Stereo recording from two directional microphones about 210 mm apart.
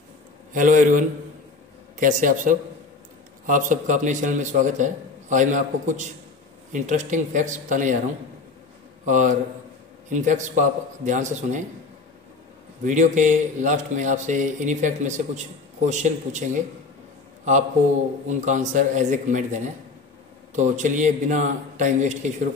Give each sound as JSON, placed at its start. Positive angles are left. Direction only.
{"t": 0.5, "sound": "speech", "side_deg": -40}
{"t": 9.0, "sound": "speech", "side_deg": -35}
{"t": 12.8, "sound": "speech", "side_deg": -35}
{"t": 18.4, "sound": "speech", "side_deg": -35}